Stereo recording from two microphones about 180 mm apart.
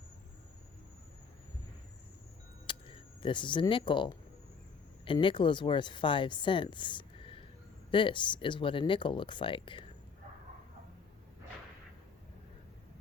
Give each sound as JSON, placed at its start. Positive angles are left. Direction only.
{"t": 2.6, "sound": "speech", "side_deg": 30}